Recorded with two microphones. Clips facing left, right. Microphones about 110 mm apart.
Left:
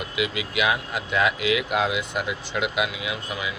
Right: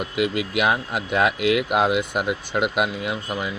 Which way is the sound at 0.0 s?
50° right (ahead or behind).